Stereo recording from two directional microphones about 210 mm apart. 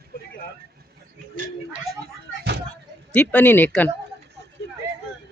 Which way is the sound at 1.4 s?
40° right (ahead or behind).